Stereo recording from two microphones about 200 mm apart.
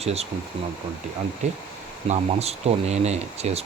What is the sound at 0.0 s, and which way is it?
Speech, 30° right (ahead or behind).